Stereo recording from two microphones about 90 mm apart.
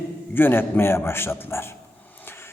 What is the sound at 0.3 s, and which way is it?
A man's voice, 25° left (ahead or behind).